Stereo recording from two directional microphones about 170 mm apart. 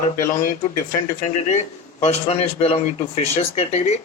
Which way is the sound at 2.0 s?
40° left (ahead or behind).